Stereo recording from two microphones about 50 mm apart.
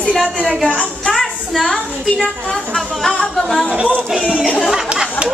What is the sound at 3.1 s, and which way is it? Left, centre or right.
Music, centre.